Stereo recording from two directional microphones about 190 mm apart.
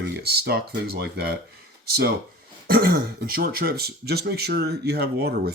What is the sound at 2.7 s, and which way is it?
Speech, 50° right (ahead or behind).